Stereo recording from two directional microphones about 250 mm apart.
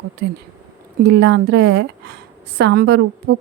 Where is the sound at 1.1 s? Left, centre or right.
Right.